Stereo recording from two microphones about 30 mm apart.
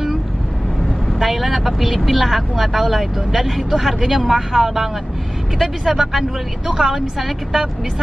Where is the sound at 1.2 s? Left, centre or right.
Centre.